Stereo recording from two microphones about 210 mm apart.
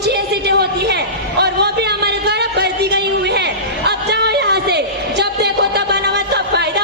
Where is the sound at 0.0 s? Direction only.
50° right (ahead or behind).